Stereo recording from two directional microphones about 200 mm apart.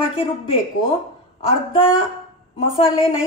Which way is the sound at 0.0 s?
30° left (ahead or behind).